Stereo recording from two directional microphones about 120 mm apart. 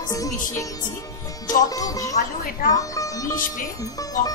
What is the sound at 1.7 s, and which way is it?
Speech, 30° left (ahead or behind).